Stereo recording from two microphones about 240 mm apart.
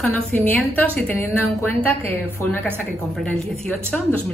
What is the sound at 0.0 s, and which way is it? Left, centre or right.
A woman's voice, centre.